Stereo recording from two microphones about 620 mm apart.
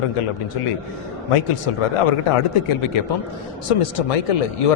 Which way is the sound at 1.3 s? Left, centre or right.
Left.